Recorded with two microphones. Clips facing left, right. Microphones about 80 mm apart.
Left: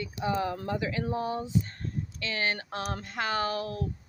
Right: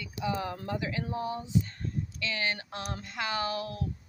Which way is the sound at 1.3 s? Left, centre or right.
Left.